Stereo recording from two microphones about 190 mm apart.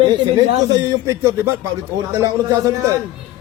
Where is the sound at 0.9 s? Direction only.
15° right (ahead or behind).